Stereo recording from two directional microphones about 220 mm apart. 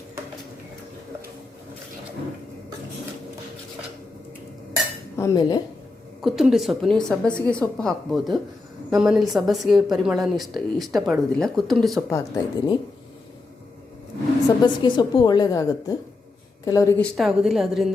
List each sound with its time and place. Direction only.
5.1 s speech: 15° left (ahead or behind)
6.2 s a woman's voice: centre (ahead or behind)
12.1 s speech: 15° left (ahead or behind)
14.4 s a woman's voice: 20° left (ahead or behind)
17.2 s a woman's voice: centre (ahead or behind)